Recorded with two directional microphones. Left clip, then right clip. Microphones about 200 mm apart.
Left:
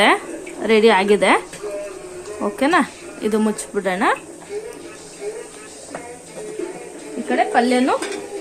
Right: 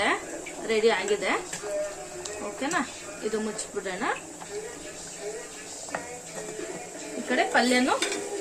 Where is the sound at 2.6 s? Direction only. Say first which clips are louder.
Left 12 dB; 55° left (ahead or behind).